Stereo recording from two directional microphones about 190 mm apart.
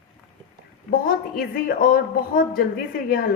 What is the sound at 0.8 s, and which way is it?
A woman's voice, 50° left (ahead or behind).